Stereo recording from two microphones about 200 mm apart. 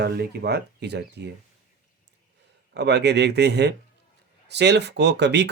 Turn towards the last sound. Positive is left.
turn(degrees=-60)  # may be behind; listen again after turning